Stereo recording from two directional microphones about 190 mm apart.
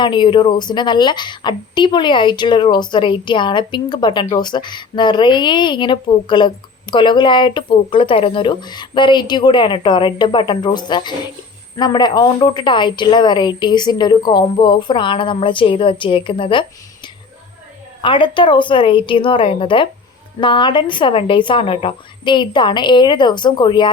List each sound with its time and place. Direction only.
0.0 s a woman's voice: 25° left (ahead or behind)
18.0 s a woman's voice: 25° left (ahead or behind)